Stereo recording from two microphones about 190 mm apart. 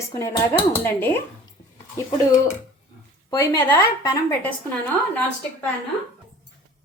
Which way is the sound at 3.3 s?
15° left (ahead or behind).